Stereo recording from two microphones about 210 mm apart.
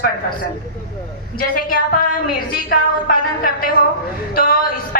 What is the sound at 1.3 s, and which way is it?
A woman's voice, 45° left (ahead or behind).